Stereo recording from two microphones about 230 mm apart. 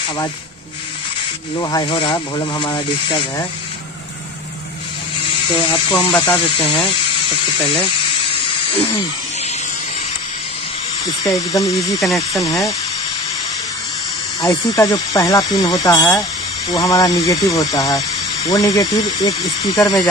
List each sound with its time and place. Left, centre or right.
1.6 s speech: centre
5.2 s speech: left
11.2 s speech: centre
12.0 s speech: centre
14.4 s speech: centre